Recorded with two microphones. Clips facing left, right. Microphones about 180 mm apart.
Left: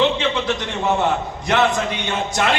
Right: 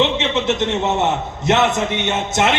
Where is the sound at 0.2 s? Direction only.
25° right (ahead or behind).